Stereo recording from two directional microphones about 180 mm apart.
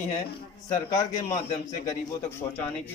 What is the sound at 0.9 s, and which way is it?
Speech, 20° left (ahead or behind).